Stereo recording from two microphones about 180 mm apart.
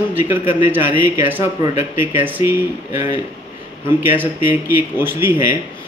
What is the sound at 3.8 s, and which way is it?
A man's voice, 10° right (ahead or behind).